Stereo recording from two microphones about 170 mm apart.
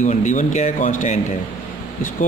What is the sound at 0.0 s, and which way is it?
A man's voice, 45° left (ahead or behind).